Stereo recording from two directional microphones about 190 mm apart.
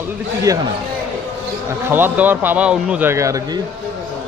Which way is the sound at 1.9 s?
10° right (ahead or behind).